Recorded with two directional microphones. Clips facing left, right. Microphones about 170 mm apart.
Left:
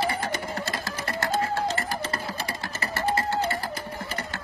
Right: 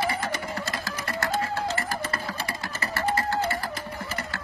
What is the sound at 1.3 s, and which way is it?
Music, 30° left (ahead or behind).